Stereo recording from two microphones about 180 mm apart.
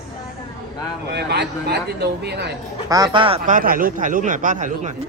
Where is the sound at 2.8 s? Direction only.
20° right (ahead or behind).